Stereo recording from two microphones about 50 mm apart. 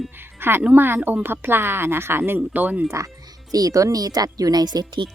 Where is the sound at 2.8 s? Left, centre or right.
Right.